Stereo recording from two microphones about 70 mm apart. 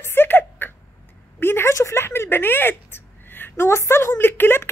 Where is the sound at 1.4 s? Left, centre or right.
Left.